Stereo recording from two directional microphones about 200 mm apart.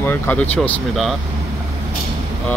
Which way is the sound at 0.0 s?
10° left (ahead or behind).